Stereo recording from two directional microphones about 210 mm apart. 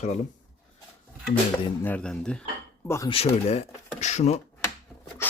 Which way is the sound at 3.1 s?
30° left (ahead or behind).